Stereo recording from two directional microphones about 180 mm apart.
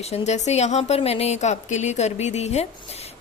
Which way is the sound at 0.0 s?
35° left (ahead or behind).